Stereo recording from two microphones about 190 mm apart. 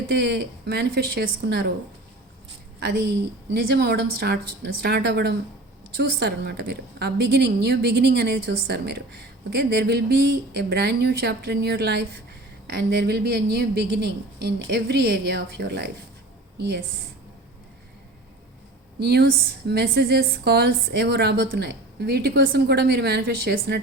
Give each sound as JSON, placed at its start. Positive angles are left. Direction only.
{"t": 0.2, "sound": "a woman's voice", "side_deg": -65}
{"t": 2.8, "sound": "a woman's voice", "side_deg": -65}
{"t": 18.9, "sound": "a woman's voice", "side_deg": -60}